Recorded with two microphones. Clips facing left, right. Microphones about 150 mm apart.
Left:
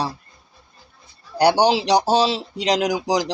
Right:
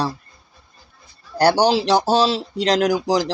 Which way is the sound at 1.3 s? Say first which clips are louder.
Even; 15° left (ahead or behind).